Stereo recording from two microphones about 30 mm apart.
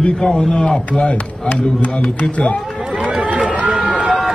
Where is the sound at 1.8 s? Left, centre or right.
Left.